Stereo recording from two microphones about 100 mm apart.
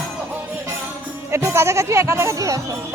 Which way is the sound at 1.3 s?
25° right (ahead or behind).